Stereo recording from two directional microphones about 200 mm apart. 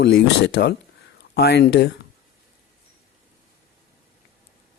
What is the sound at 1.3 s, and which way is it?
Speech, 55° left (ahead or behind).